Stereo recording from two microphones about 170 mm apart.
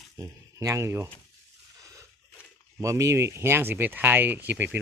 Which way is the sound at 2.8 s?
20° right (ahead or behind).